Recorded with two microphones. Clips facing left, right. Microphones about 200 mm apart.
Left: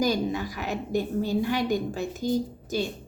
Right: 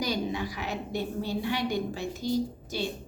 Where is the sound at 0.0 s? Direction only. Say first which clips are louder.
Left 5 dB; 45° left (ahead or behind).